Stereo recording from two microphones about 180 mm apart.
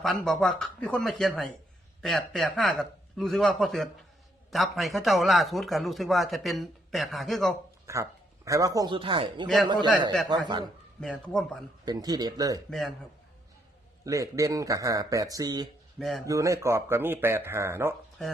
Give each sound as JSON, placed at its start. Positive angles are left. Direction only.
{"t": 0.0, "sound": "a man's voice", "side_deg": 0}
{"t": 7.9, "sound": "a sound", "side_deg": -15}
{"t": 8.4, "sound": "a man's voice", "side_deg": -20}
{"t": 11.0, "sound": "a man's voice", "side_deg": 5}
{"t": 11.9, "sound": "a man's voice", "side_deg": -20}
{"t": 14.0, "sound": "a man's voice", "side_deg": -20}
{"t": 16.0, "sound": "a man's voice", "side_deg": 0}
{"t": 16.2, "sound": "speech", "side_deg": -15}